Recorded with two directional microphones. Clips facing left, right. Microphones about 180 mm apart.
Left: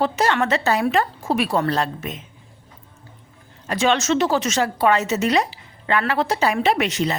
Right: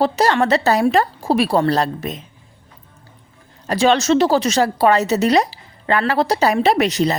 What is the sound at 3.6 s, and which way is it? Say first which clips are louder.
A woman's voice: right 4 dB; 35° right (ahead or behind).